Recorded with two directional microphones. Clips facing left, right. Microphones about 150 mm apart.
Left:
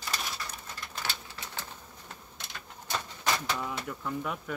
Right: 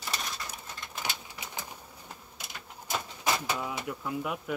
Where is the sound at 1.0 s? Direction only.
15° right (ahead or behind).